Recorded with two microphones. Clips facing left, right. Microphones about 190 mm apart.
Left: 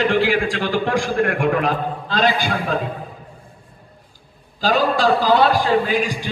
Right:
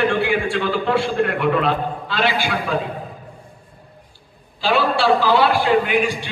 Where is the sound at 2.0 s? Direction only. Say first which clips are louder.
Left 4 dB; 40° left (ahead or behind).